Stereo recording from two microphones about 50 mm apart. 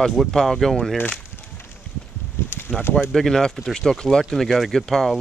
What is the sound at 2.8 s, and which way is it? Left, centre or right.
Speech, left.